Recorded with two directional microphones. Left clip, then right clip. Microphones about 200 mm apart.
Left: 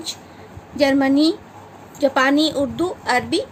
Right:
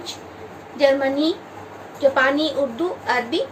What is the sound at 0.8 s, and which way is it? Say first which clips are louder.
A woman's voice: left 1 dB; 60° left (ahead or behind).